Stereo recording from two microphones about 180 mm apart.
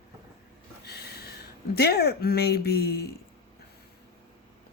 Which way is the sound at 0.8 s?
65° left (ahead or behind).